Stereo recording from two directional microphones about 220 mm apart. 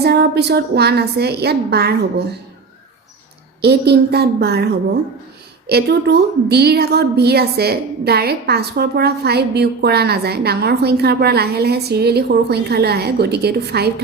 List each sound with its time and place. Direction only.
0.0 s a woman's voice: 50° right (ahead or behind)
3.6 s a woman's voice: 50° right (ahead or behind)